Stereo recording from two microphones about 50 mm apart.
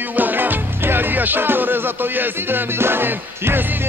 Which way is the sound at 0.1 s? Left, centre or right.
Right.